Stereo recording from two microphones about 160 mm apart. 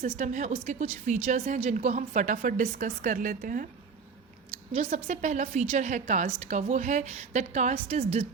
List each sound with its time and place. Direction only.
0.0 s a woman's voice: 50° right (ahead or behind)
1.6 s a woman's voice: 45° right (ahead or behind)
4.7 s a woman's voice: 45° right (ahead or behind)